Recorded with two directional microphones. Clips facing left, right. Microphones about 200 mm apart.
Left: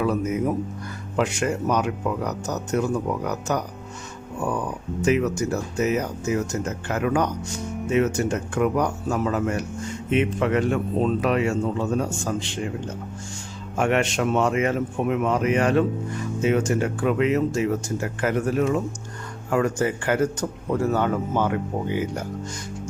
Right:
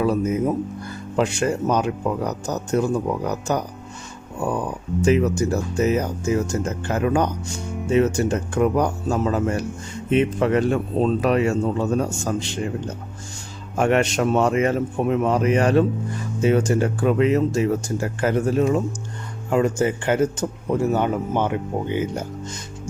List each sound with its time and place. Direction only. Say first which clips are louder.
0.0 s speech: right 3 dB; 30° right (ahead or behind)
13.7 s speech: right 3 dB; 40° right (ahead or behind); by 22.3 s 25° right (ahead or behind)